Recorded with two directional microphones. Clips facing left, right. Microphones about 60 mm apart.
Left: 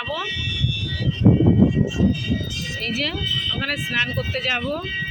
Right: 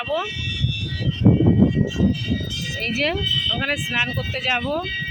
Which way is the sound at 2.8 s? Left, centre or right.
Right.